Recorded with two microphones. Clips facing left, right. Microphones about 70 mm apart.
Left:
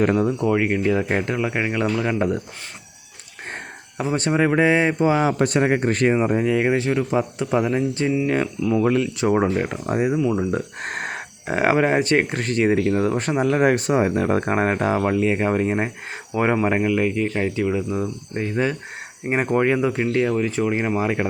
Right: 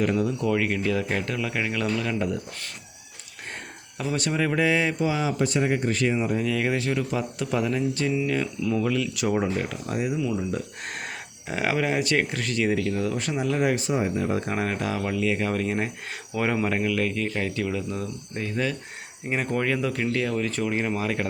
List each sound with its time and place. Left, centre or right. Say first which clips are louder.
0.0 s speech: left 5 dB; left
0.4 s speech: left 5 dB; left
3.9 s speech: left 6 dB; left
5.1 s speech: left 6 dB; left